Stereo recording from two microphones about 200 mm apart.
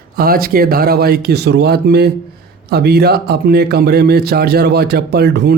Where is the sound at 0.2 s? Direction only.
50° right (ahead or behind).